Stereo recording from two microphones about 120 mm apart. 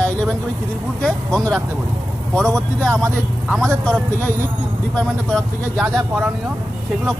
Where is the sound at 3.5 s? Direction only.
20° right (ahead or behind).